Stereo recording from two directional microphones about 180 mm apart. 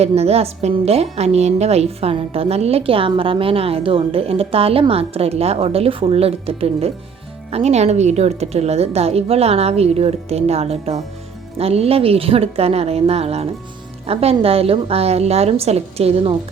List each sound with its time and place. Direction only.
0.0 s a woman's voice: 35° right (ahead or behind)